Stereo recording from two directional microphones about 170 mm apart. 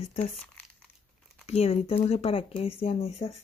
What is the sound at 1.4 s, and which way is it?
Speech, 35° left (ahead or behind).